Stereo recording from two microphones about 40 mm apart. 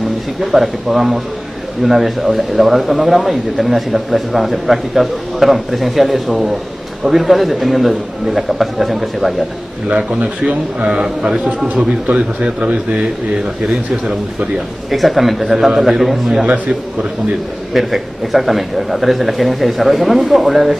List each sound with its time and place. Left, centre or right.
0.4 s a man's voice: centre
9.9 s speech: right
10.9 s a man's voice: centre
11.6 s speech: right
14.9 s a man's voice: centre
17.7 s a man's voice: centre